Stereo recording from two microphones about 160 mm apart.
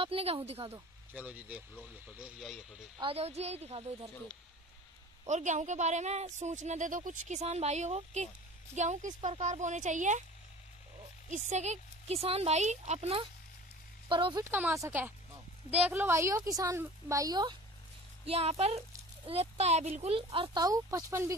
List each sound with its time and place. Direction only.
0.0 s a woman's voice: 40° right (ahead or behind)
1.1 s speech: 10° right (ahead or behind)
3.0 s a woman's voice: 35° right (ahead or behind)
5.2 s speech: 50° right (ahead or behind)
11.2 s speech: 50° right (ahead or behind); by 14.4 s 30° right (ahead or behind)
14.4 s a woman's voice: 15° right (ahead or behind)
18.2 s a woman's voice: 40° right (ahead or behind); by 21.4 s 20° right (ahead or behind)